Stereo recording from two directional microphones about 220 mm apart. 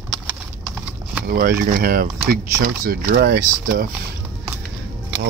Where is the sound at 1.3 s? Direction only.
40° right (ahead or behind).